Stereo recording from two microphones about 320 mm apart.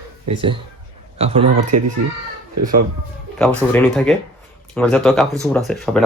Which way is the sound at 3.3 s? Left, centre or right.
Centre.